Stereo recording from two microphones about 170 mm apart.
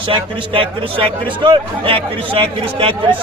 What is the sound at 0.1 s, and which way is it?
Speech, 30° right (ahead or behind).